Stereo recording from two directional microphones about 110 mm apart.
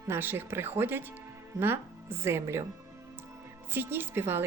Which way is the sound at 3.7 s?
20° right (ahead or behind).